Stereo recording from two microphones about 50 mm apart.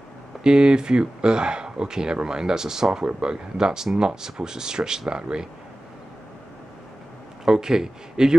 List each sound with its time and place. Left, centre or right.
0.4 s speech: centre
7.4 s speech: centre